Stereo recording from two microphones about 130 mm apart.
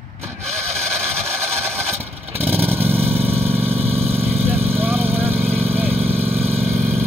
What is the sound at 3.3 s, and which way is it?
Vehicle, 50° right (ahead or behind).